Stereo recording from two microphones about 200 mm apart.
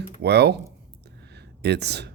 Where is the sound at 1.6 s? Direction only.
55° right (ahead or behind).